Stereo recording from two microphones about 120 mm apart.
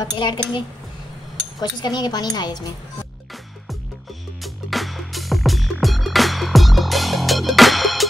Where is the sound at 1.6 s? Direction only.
35° left (ahead or behind).